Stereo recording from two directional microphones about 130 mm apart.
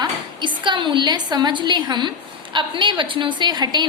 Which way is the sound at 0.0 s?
35° right (ahead or behind).